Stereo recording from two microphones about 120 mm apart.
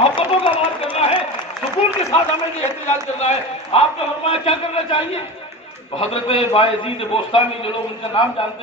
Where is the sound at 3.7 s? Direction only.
55° left (ahead or behind).